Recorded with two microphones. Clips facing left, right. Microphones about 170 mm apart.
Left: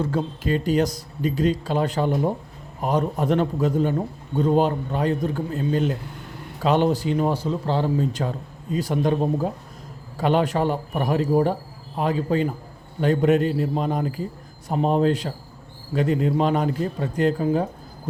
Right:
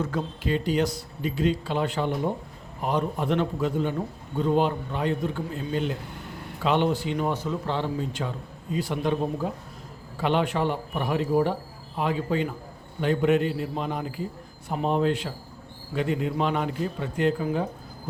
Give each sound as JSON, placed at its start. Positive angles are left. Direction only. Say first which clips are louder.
{"t": 0.4, "sound": "speech", "louder": "left 3 dB", "side_deg": 45}